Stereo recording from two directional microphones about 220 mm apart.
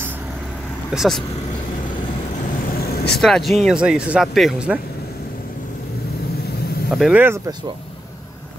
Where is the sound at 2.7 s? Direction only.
45° left (ahead or behind).